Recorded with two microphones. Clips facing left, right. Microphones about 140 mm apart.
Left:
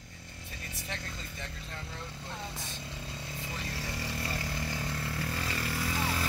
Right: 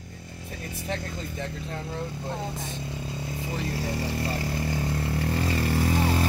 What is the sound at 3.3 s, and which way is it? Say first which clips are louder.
Vehicle: right 10 dB; 40° right (ahead or behind).